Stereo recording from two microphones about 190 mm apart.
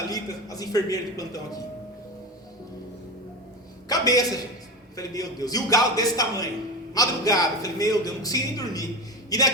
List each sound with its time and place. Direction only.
0.1 s a man's voice: 20° left (ahead or behind)
3.8 s a man's voice: 20° left (ahead or behind)